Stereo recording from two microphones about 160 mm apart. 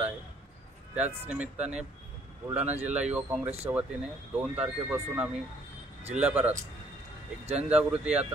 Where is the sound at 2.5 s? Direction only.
10° right (ahead or behind).